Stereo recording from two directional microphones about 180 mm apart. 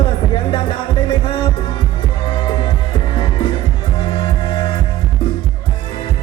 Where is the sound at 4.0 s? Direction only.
30° left (ahead or behind).